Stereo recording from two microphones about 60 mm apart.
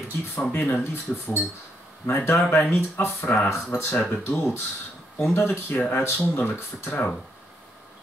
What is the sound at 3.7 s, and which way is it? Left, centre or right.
Speech, left.